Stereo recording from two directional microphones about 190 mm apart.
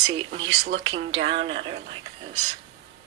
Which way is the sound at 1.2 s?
30° right (ahead or behind).